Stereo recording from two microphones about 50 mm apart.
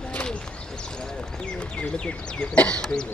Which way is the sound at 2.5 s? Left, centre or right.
Left.